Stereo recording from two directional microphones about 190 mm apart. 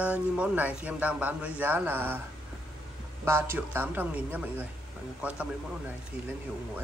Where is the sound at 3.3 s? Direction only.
10° right (ahead or behind).